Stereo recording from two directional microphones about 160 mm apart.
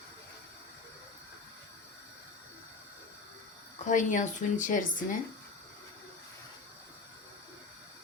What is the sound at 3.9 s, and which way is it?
Speech, 50° left (ahead or behind).